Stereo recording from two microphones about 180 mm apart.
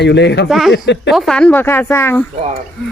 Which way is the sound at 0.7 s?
75° left (ahead or behind).